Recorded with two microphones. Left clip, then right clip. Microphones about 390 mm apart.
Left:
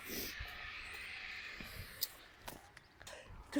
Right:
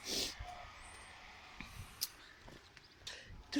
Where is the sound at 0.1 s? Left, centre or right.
Centre.